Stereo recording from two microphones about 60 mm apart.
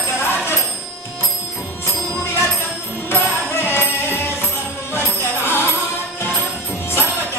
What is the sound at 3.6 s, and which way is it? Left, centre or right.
Music, left.